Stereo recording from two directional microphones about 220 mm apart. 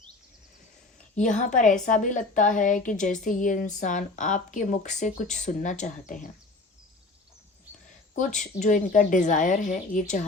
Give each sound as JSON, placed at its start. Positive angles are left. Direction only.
{"t": 1.1, "sound": "speech", "side_deg": 35}
{"t": 8.1, "sound": "speech", "side_deg": 35}